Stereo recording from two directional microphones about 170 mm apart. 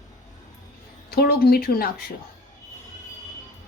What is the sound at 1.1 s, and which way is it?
Speech, 65° left (ahead or behind).